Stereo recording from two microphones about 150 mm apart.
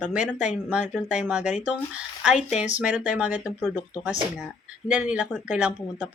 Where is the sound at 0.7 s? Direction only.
10° right (ahead or behind).